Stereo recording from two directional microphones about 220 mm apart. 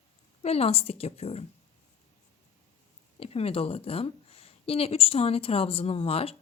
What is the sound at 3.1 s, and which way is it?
Speech, 25° left (ahead or behind).